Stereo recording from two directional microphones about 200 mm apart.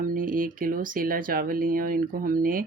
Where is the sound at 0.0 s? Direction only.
45° right (ahead or behind).